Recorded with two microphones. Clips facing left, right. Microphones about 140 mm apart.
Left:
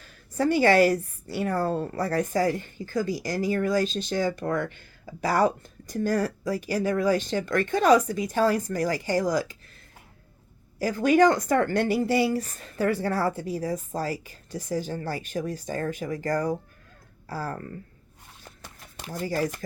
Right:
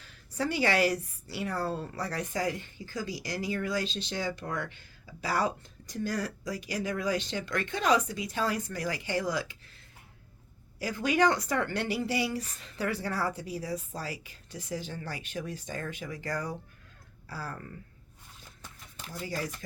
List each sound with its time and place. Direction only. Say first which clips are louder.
0.0 s a woman's voice: left 7 dB; 45° left (ahead or behind)
10.8 s a woman's voice: left 7 dB; 45° left (ahead or behind)
18.6 s a sound: left 5 dB; 70° left (ahead or behind)
19.2 s a woman's voice: left 8 dB; 45° left (ahead or behind)